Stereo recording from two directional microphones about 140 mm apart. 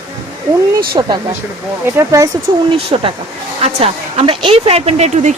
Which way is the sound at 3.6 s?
50° right (ahead or behind).